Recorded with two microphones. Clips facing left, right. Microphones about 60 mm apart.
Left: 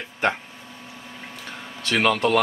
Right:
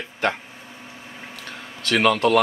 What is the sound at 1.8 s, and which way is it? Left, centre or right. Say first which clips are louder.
Speech: right 2 dB; centre.